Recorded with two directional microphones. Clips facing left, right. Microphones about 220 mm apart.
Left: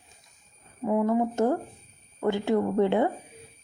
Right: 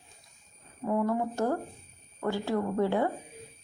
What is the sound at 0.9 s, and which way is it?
Speech, 10° left (ahead or behind).